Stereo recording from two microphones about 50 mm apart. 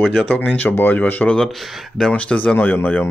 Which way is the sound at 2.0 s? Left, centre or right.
Left.